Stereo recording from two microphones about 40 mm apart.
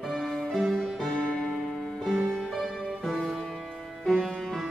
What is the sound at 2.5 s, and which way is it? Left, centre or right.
Music, centre.